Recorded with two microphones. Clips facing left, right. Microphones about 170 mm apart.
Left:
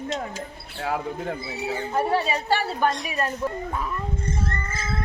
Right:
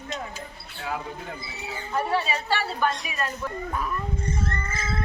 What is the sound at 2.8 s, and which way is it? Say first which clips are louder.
Speech: left 3 dB; 45° left (ahead or behind).